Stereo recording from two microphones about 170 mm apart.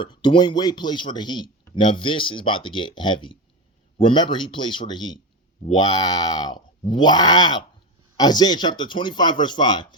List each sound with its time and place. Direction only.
0.0 s speech: 25° left (ahead or behind)